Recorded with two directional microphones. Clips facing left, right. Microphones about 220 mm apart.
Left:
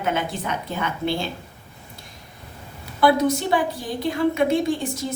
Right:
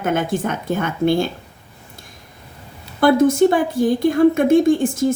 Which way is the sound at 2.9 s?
50° right (ahead or behind).